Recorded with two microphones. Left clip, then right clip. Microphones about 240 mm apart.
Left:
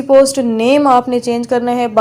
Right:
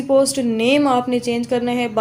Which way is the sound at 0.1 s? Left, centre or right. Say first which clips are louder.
Left 7 dB; left.